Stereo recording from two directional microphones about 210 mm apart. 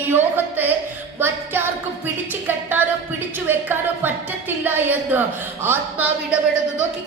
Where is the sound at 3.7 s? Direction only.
10° right (ahead or behind).